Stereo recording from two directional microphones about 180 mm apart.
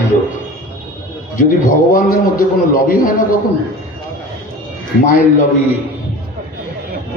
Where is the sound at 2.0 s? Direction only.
50° left (ahead or behind).